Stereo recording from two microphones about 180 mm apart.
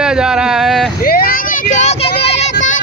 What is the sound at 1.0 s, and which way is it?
Vehicle, 55° left (ahead or behind).